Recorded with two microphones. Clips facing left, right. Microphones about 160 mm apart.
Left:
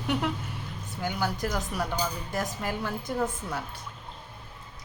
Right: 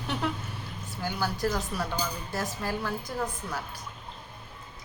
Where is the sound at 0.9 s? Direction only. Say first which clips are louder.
Left 1 dB; 20° left (ahead or behind).